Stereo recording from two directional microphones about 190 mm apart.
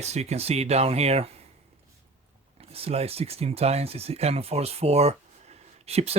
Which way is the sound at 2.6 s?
30° right (ahead or behind).